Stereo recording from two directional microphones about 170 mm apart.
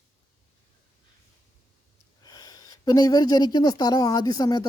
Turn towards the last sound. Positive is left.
turn(degrees=20)  # may be behind; listen again after turning